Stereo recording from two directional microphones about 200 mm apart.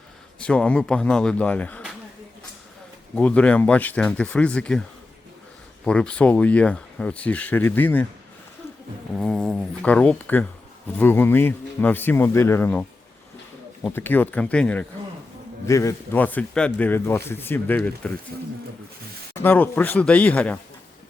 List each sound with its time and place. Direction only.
0.3 s speech: 5° left (ahead or behind)
3.2 s speech: 5° left (ahead or behind)
5.8 s speech: 5° left (ahead or behind)
9.1 s speech: 5° left (ahead or behind)
13.9 s speech: 10° left (ahead or behind)
19.4 s speech: 10° left (ahead or behind)